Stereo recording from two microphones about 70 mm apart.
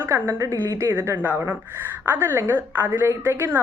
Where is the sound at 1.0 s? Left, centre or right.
Right.